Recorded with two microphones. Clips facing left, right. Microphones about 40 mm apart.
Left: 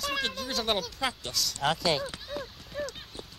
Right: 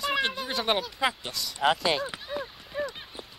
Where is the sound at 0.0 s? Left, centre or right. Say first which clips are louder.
Right 4 dB; centre.